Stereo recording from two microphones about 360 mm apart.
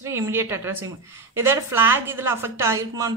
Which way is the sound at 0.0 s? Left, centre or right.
Centre.